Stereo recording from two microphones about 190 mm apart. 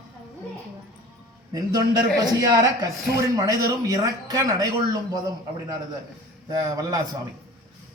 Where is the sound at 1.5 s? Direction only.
20° right (ahead or behind).